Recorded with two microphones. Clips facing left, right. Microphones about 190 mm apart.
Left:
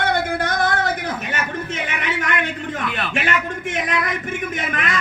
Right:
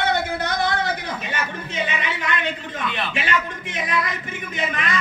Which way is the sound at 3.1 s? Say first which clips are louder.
Left 2 dB; 50° left (ahead or behind).